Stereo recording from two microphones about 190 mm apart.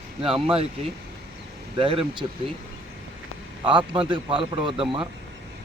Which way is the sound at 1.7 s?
30° right (ahead or behind).